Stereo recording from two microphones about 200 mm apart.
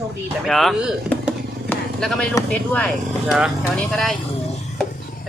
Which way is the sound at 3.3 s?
5° right (ahead or behind).